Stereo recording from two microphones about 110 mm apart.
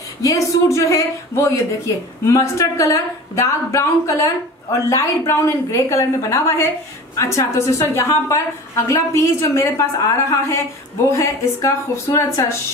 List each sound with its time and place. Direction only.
0.2 s a woman's voice: 30° left (ahead or behind)